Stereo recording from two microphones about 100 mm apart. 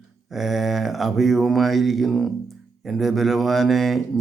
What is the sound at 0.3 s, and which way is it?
Speech, centre (ahead or behind).